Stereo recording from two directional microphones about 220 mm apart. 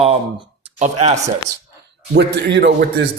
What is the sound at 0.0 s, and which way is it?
Speech, 25° right (ahead or behind).